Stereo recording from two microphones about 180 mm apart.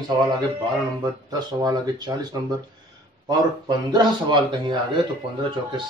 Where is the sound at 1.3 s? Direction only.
20° right (ahead or behind).